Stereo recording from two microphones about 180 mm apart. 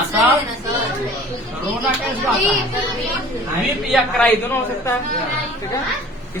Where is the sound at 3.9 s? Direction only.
10° left (ahead or behind).